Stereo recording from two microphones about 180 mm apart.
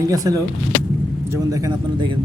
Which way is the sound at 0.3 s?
20° right (ahead or behind).